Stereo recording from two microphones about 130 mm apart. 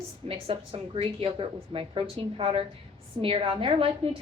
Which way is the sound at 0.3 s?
45° right (ahead or behind).